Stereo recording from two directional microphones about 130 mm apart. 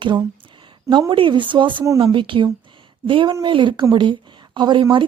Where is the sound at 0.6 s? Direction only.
35° right (ahead or behind).